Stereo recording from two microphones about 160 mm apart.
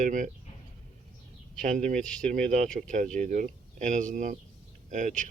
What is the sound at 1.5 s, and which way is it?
Speech, 55° right (ahead or behind).